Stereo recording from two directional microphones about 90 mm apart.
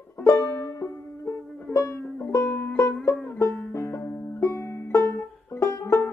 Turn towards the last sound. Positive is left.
turn(degrees=35)  # may be behind; listen again after turning